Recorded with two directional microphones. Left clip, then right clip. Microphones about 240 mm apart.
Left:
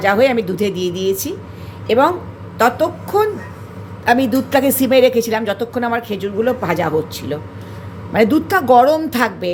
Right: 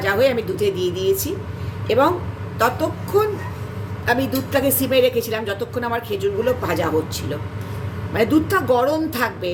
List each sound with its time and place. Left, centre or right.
0.0 s a woman's voice: left